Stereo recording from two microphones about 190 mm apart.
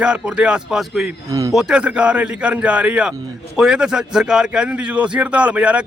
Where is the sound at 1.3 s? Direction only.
20° right (ahead or behind).